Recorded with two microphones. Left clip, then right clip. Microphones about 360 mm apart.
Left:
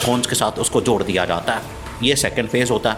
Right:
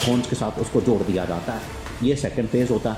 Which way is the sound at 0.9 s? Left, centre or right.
Left.